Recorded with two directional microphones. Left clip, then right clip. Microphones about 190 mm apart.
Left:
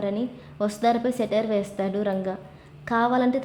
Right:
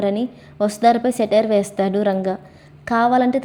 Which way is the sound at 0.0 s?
20° right (ahead or behind).